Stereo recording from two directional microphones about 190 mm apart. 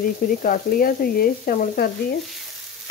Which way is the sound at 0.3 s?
50° left (ahead or behind).